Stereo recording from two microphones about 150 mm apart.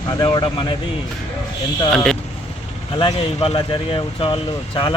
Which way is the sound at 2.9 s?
35° left (ahead or behind).